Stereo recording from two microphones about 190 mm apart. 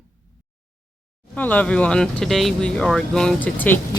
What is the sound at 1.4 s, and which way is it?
Speech, 10° left (ahead or behind).